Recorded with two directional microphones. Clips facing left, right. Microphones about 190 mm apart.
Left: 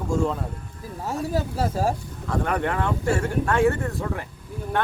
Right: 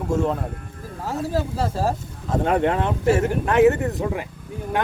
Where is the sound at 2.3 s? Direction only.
25° right (ahead or behind).